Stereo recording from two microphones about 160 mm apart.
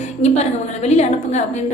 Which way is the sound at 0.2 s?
45° left (ahead or behind).